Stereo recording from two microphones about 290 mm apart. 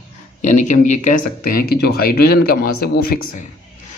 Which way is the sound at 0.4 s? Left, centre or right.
Left.